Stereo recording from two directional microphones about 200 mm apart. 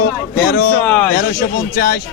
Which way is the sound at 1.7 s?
50° left (ahead or behind).